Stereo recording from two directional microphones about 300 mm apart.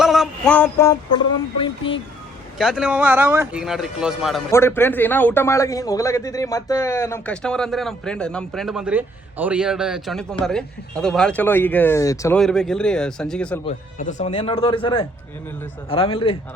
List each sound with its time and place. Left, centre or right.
0.0 s a sound: centre
2.6 s speech: centre
13.7 s speech: left